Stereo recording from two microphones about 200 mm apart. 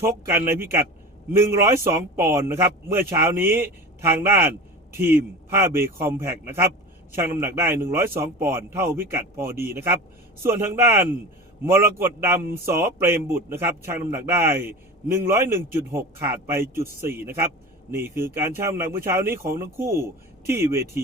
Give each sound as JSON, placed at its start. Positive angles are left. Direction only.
{"t": 0.3, "sound": "a man's voice", "side_deg": -10}